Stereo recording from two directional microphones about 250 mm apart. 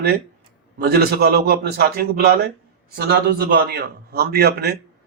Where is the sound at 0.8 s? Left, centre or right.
Right.